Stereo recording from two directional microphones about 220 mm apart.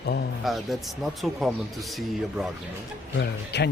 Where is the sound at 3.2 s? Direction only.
50° left (ahead or behind).